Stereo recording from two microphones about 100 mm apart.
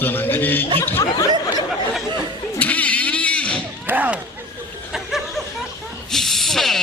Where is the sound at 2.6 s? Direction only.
15° left (ahead or behind).